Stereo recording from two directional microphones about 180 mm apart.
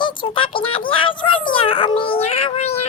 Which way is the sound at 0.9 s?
30° left (ahead or behind).